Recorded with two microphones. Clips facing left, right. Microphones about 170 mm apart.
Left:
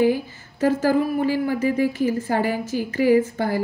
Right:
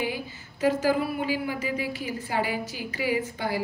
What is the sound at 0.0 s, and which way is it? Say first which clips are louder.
A woman's voice: left 11 dB; 45° left (ahead or behind).